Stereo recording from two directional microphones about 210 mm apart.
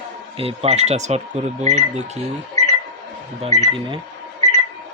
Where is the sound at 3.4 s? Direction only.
30° right (ahead or behind).